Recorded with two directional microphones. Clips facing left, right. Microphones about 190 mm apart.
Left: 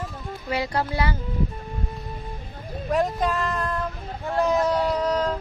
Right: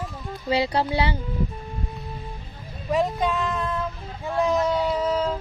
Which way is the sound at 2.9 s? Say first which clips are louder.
Even; centre (ahead or behind).